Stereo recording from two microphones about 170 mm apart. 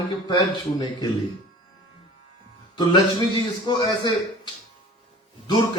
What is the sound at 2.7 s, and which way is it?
A man's voice, 25° left (ahead or behind).